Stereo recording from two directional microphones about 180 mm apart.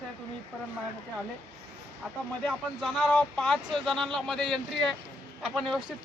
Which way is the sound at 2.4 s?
5° left (ahead or behind).